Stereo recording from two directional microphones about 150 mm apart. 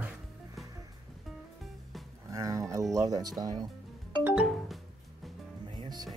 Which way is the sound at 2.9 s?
25° right (ahead or behind).